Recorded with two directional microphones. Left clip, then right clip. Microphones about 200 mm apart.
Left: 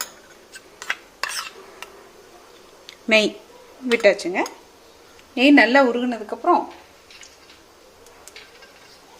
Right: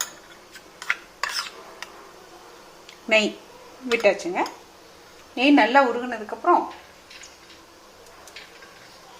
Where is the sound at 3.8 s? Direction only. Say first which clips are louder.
Left 3 dB; 25° left (ahead or behind).